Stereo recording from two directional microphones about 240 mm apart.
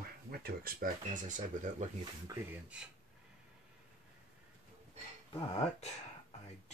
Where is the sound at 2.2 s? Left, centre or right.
Centre.